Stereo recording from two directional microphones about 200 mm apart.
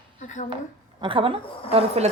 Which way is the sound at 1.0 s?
25° right (ahead or behind).